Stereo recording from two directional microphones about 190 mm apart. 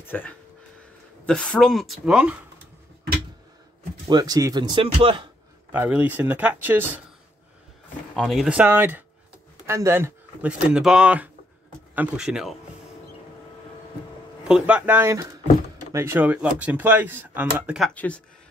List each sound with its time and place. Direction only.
0.0 s speech: 10° left (ahead or behind)
4.1 s speech: 20° right (ahead or behind)
5.7 s speech: 10° right (ahead or behind)
8.2 s speech: centre (ahead or behind)
14.5 s speech: 5° right (ahead or behind)